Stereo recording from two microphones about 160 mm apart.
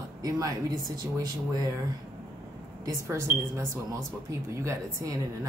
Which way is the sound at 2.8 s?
20° right (ahead or behind).